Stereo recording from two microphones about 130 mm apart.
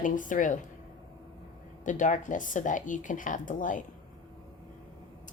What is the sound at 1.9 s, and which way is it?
Speech, 75° left (ahead or behind).